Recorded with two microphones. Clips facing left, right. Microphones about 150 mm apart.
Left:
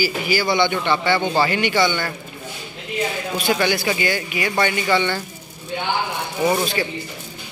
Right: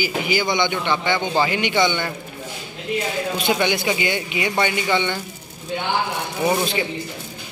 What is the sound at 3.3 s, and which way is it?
Speech, 20° right (ahead or behind).